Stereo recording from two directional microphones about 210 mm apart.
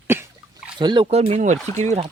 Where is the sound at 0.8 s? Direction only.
20° right (ahead or behind).